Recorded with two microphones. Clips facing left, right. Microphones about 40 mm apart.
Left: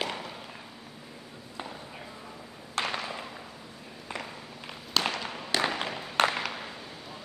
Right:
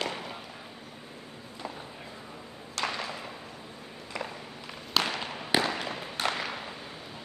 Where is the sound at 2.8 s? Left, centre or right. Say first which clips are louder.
Left 1 dB; left.